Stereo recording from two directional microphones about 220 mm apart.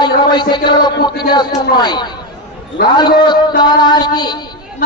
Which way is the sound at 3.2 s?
20° left (ahead or behind).